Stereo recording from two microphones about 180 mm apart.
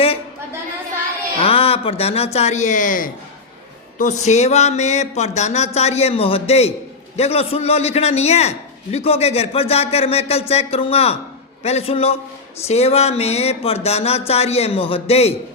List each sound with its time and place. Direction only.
1.4 s a man's voice: 35° left (ahead or behind)